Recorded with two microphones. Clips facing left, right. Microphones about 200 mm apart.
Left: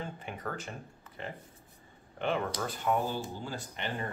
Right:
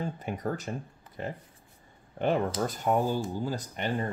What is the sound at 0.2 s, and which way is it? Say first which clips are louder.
Speech: right 6 dB; 40° right (ahead or behind).